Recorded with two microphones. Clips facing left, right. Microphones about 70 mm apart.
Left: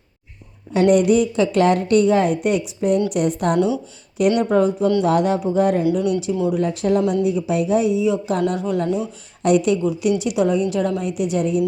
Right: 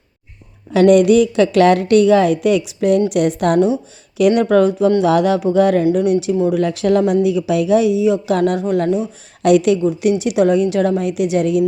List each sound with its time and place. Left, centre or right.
0.7 s a woman's voice: right
3.1 s speech: right
4.9 s a woman's voice: right
5.9 s a woman's voice: right
6.5 s a woman's voice: right
8.5 s speech: right
9.4 s speech: right
10.0 s a woman's voice: right